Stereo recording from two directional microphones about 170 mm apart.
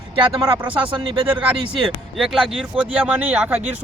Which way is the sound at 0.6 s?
10° right (ahead or behind).